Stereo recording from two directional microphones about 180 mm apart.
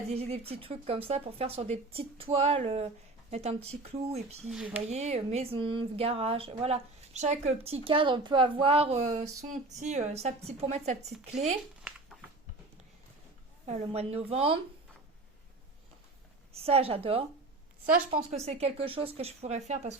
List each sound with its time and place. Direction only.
0.1 s speech: 35° right (ahead or behind)
4.4 s speech: 5° right (ahead or behind)
4.9 s speech: 35° right (ahead or behind)
11.8 s a sound: 5° right (ahead or behind)
13.8 s speech: 35° right (ahead or behind)
16.6 s speech: 35° right (ahead or behind)